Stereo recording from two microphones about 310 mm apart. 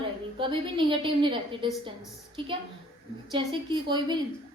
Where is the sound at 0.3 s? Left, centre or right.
Centre.